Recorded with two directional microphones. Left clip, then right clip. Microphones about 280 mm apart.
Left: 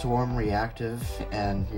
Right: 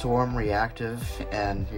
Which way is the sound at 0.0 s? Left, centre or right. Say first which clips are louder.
Right 2 dB; centre.